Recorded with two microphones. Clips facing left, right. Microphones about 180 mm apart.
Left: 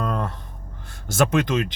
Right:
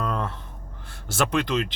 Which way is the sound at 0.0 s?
40° left (ahead or behind).